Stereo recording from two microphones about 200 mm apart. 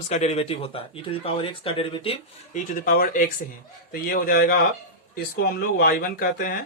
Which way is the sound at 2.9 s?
45° left (ahead or behind).